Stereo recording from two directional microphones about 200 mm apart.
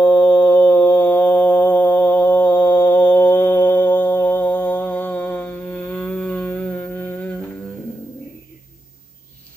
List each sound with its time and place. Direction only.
0.0 s mantra: 5° left (ahead or behind)